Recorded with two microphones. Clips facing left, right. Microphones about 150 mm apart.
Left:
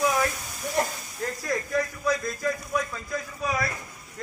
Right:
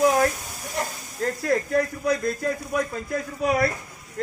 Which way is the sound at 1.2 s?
60° right (ahead or behind).